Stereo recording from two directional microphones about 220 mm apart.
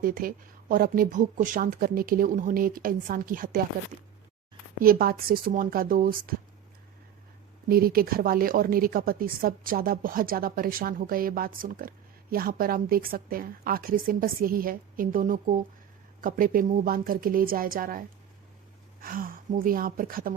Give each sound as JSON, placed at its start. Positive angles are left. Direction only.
{"t": 0.0, "sound": "a woman's voice", "side_deg": -40}
{"t": 4.8, "sound": "a woman's voice", "side_deg": -40}
{"t": 7.7, "sound": "a woman's voice", "side_deg": -45}